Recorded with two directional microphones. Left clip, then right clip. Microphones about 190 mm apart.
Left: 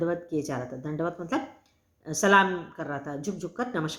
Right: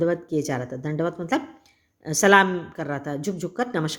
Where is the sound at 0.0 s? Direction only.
40° right (ahead or behind).